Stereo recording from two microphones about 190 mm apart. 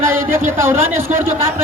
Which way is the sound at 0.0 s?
15° right (ahead or behind).